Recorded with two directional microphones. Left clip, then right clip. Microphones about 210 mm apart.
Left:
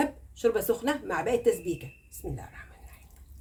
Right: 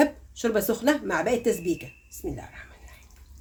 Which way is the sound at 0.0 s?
25° right (ahead or behind).